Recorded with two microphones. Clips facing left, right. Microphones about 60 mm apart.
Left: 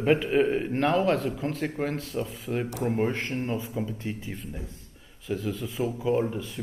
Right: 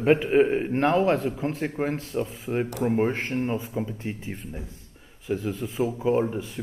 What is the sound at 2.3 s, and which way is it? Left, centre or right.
A man's voice, centre.